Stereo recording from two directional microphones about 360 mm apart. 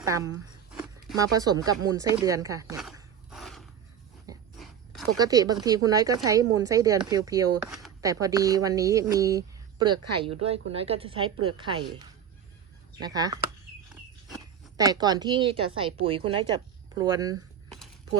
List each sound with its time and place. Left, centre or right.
0.0 s a woman's voice: centre
3.3 s a sound: centre
5.1 s a woman's voice: centre
10.0 s speech: right
10.4 s a woman's voice: centre
13.0 s a woman's voice: centre
14.8 s a woman's voice: centre
17.7 s a sound: centre